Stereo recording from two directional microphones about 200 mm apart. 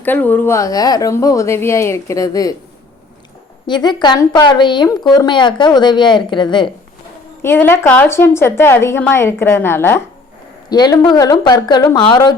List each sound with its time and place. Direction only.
0.0 s a woman's voice: 10° left (ahead or behind)
3.7 s a woman's voice: 20° left (ahead or behind)
7.4 s a woman's voice: 10° left (ahead or behind)